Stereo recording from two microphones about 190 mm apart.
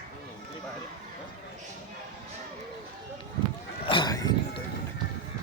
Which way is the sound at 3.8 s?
25° left (ahead or behind).